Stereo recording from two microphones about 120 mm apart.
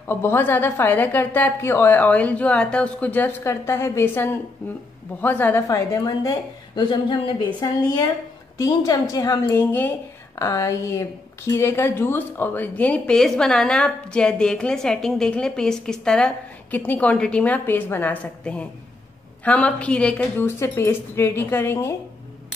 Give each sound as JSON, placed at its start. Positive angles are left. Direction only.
{"t": 0.0, "sound": "a woman's voice", "side_deg": 20}
{"t": 5.7, "sound": "a woman's voice", "side_deg": 30}
{"t": 7.6, "sound": "a woman's voice", "side_deg": 30}
{"t": 9.6, "sound": "a woman's voice", "side_deg": 15}
{"t": 20.4, "sound": "speech", "side_deg": 20}